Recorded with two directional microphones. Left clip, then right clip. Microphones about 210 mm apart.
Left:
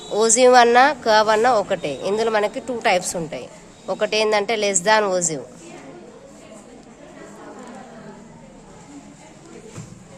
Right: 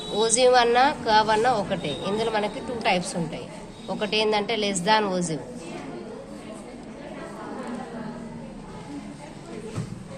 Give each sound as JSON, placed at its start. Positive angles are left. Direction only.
{"t": 0.2, "sound": "speech", "side_deg": 60}